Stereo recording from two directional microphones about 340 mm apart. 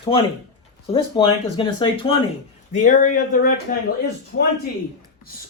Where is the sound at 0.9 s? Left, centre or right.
Centre.